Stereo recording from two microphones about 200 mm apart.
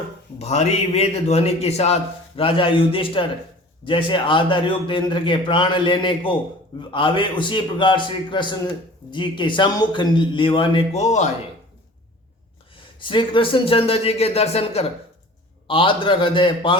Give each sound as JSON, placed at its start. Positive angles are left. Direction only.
{"t": 0.3, "sound": "a man's voice", "side_deg": 35}
{"t": 12.7, "sound": "a man's voice", "side_deg": 25}